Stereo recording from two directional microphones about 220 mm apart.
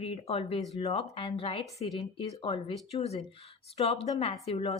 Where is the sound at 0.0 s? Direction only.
25° left (ahead or behind).